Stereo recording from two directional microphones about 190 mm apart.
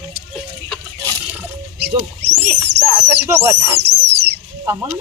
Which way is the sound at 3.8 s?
60° right (ahead or behind).